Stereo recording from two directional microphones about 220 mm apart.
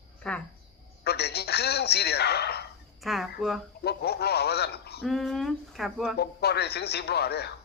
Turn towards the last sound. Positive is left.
turn(degrees=45)  # may be behind; listen again after turning